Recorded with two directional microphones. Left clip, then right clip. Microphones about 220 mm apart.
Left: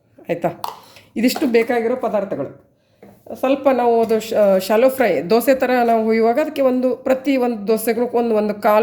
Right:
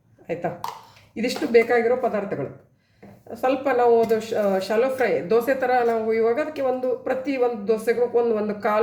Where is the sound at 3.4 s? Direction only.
30° left (ahead or behind).